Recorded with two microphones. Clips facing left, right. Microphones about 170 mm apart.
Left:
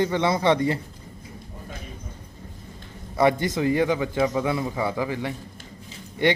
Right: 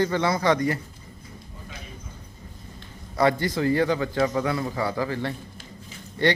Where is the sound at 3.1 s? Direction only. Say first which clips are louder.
Left 1 dB; 20° left (ahead or behind).